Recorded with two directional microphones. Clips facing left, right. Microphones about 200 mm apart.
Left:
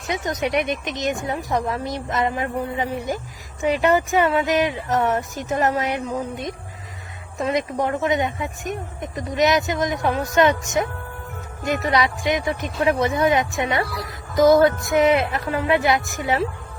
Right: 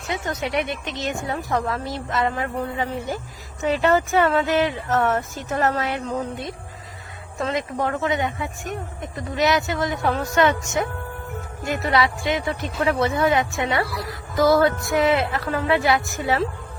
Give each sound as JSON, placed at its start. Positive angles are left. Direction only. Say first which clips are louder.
{"t": 0.1, "sound": "speech", "louder": "left 3 dB", "side_deg": 15}